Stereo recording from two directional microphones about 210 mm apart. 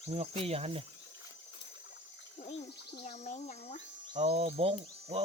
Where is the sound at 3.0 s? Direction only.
30° left (ahead or behind).